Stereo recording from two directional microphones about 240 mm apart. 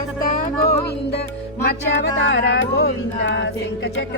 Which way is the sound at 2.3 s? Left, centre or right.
Left.